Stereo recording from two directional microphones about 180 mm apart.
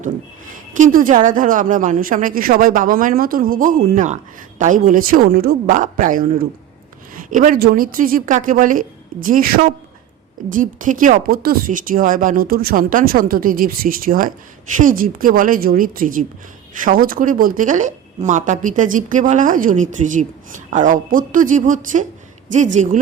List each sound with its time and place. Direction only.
0.8 s speech: 50° right (ahead or behind)